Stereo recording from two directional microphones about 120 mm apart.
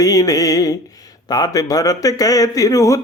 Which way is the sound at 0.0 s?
30° left (ahead or behind).